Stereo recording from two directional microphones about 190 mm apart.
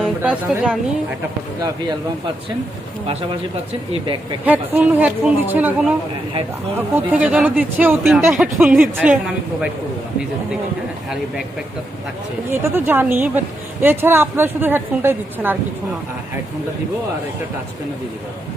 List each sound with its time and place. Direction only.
0.0 s speech: 10° right (ahead or behind)
3.9 s speech: 25° right (ahead or behind)
4.4 s speech: 10° right (ahead or behind)
12.5 s speech: 10° right (ahead or behind)